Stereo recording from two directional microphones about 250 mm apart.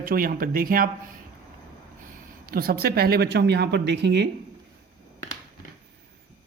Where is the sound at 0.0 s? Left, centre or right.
Right.